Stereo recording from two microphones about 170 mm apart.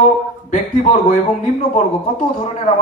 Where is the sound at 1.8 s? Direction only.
45° left (ahead or behind).